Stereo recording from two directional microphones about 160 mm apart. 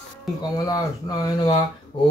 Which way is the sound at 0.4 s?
25° left (ahead or behind).